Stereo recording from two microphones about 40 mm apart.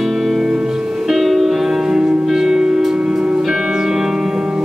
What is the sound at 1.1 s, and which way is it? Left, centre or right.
Music, centre.